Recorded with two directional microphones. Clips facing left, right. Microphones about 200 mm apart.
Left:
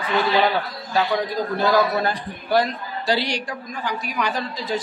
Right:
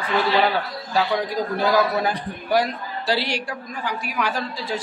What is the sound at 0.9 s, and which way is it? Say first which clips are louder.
A woman's voice: even; 10° right (ahead or behind).